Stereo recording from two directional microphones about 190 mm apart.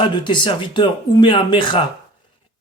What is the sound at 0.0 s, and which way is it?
Speech, 25° left (ahead or behind).